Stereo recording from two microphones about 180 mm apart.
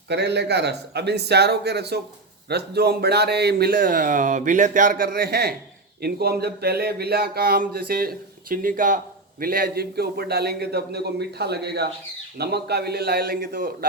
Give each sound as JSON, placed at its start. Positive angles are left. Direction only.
{"t": 0.1, "sound": "a man's voice", "side_deg": -70}